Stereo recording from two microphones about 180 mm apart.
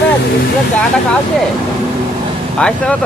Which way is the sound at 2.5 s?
5° left (ahead or behind).